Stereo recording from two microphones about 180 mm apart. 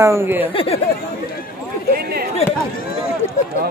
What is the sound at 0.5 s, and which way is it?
Speech, 35° left (ahead or behind).